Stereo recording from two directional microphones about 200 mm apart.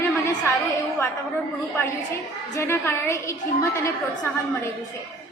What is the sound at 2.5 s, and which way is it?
Speech, 10° left (ahead or behind).